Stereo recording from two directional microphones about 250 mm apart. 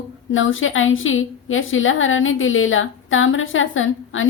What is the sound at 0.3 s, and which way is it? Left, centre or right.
A woman's voice, left.